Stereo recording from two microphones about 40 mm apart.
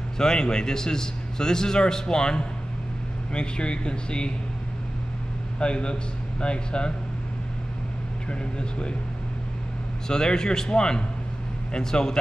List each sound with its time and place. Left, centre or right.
0.2 s a man's voice: centre
5.6 s speech: left
8.3 s speech: left
10.0 s a man's voice: centre